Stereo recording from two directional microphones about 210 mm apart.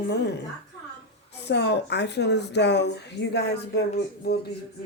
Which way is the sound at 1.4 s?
55° left (ahead or behind).